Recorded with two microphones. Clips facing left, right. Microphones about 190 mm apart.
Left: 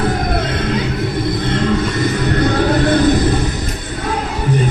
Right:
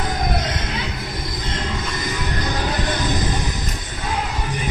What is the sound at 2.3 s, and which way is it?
Music, 60° left (ahead or behind).